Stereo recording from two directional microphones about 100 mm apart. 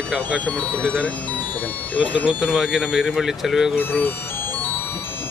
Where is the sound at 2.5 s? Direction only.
5° right (ahead or behind).